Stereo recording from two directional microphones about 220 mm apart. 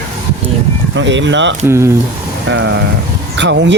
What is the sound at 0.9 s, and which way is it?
Speech, 55° right (ahead or behind).